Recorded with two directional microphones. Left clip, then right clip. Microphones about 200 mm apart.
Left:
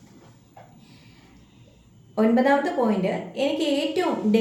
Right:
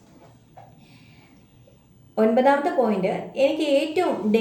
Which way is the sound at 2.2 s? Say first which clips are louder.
Right 2 dB; 10° right (ahead or behind).